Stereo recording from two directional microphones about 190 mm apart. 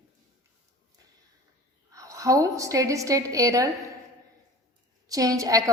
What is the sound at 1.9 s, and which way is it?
A woman's voice, 15° right (ahead or behind).